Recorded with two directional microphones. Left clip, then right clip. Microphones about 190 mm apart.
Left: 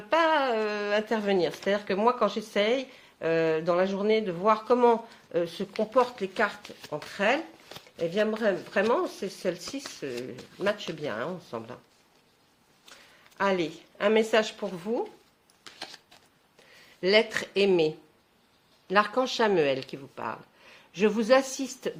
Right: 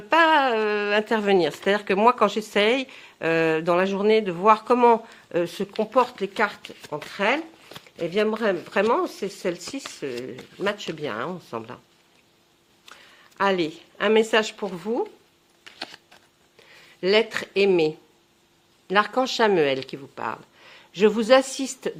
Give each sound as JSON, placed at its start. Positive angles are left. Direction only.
{"t": 0.1, "sound": "speech", "side_deg": -35}
{"t": 12.8, "sound": "speech", "side_deg": -30}
{"t": 17.0, "sound": "speech", "side_deg": -25}